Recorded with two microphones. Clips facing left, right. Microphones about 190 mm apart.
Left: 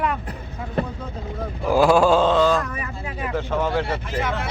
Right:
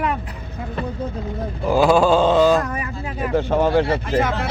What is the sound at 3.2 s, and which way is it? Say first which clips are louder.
Speech: right 6 dB; 35° right (ahead or behind).